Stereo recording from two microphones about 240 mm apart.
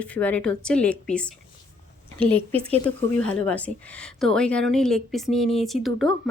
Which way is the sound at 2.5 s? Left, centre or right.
Right.